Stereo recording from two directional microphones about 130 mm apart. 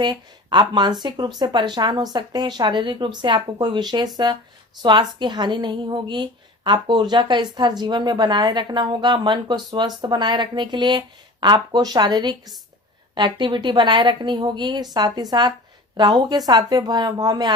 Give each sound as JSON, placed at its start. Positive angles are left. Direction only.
{"t": 0.0, "sound": "a woman's voice", "side_deg": -35}